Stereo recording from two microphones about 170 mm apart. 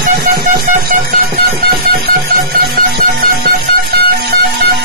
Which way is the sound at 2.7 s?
70° right (ahead or behind).